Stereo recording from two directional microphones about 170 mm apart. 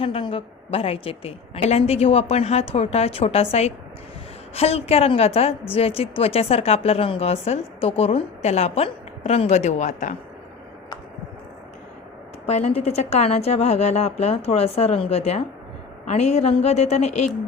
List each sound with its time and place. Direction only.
0.0 s a woman's voice: 30° left (ahead or behind)
12.5 s a woman's voice: 40° left (ahead or behind)